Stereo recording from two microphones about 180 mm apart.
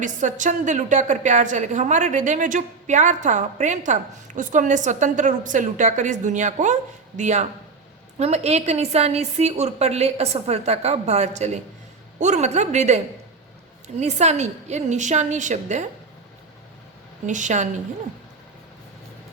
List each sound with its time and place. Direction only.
0.0 s a woman's voice: 45° right (ahead or behind)
17.2 s a woman's voice: 45° right (ahead or behind)